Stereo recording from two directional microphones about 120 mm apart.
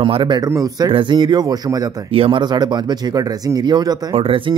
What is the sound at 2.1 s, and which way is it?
Speech, 45° right (ahead or behind).